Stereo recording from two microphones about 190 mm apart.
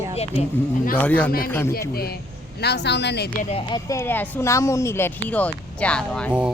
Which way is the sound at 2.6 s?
60° left (ahead or behind).